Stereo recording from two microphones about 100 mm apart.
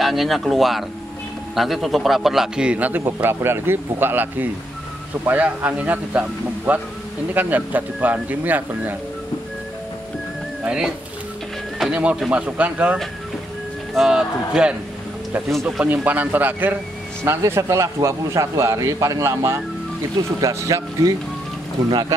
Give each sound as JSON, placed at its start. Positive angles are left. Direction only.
{"t": 0.0, "sound": "a man's voice", "side_deg": 0}
{"t": 10.6, "sound": "speech", "side_deg": -5}
{"t": 15.8, "sound": "a man's voice", "side_deg": -15}